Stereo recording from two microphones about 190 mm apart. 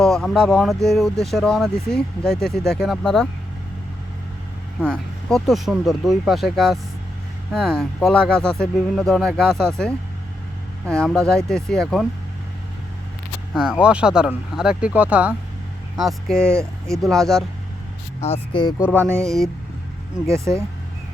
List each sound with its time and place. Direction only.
0.0 s speech: 5° left (ahead or behind)
4.8 s speech: 5° left (ahead or behind)
13.5 s speech: 5° right (ahead or behind)
18.2 s speech: 30° left (ahead or behind)
18.9 s speech: 15° right (ahead or behind)
19.2 s speech: centre (ahead or behind)
20.2 s speech: 15° right (ahead or behind)